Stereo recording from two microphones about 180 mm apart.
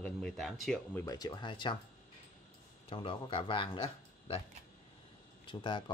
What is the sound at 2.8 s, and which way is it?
Speech, 30° left (ahead or behind).